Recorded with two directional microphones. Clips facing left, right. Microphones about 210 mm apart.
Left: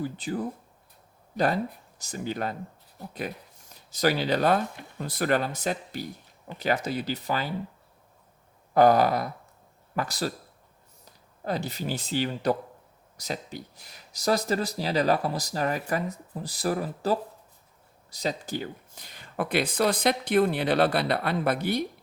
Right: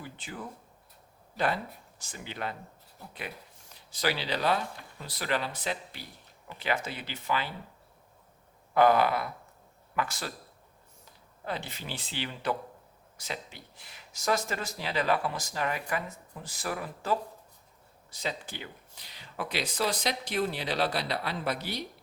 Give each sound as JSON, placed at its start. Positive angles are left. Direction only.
{"t": 0.0, "sound": "speech", "side_deg": 40}
{"t": 2.0, "sound": "speech", "side_deg": 40}
{"t": 8.7, "sound": "speech", "side_deg": 40}